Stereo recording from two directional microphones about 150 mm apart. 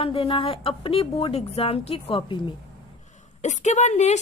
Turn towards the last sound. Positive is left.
turn(degrees=50)  # may be behind; listen again after turning